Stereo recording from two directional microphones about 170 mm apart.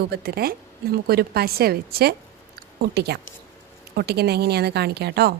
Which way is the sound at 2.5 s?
75° right (ahead or behind).